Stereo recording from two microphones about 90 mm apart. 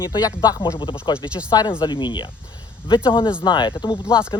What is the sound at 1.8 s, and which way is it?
Speech, 60° left (ahead or behind).